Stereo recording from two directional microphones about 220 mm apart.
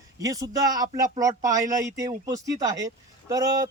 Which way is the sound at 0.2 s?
15° right (ahead or behind).